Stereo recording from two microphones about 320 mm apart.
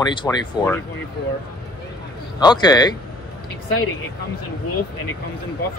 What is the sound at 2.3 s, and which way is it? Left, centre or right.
Speech, centre.